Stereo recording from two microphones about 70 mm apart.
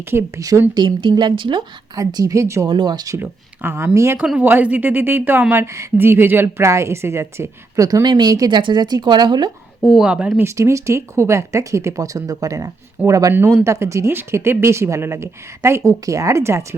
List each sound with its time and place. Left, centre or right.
0.0 s a woman's voice: right
0.3 s speech: right
0.7 s speech: right
2.0 s speech: right
2.8 s speech: right
3.2 s a woman's voice: right
3.9 s a woman's voice: right
4.4 s a woman's voice: right
7.8 s speech: right
9.8 s speech: centre
10.4 s speech: right
13.3 s a woman's voice: right